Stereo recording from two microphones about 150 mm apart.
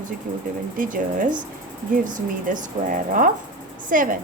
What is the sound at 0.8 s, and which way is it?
A woman's voice, 65° right (ahead or behind).